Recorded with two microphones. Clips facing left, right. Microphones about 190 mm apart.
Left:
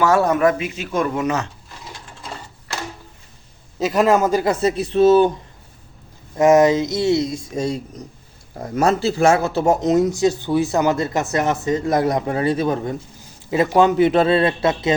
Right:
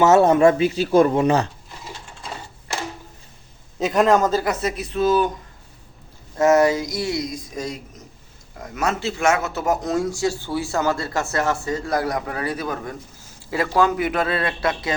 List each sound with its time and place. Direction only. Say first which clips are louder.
0.0 s speech: right 2 dB; 25° right (ahead or behind)
3.8 s a man's voice: left 1 dB; centre (ahead or behind)
4.4 s speech: left 5 dB; 30° left (ahead or behind)
6.3 s speech: left 3 dB; 15° left (ahead or behind)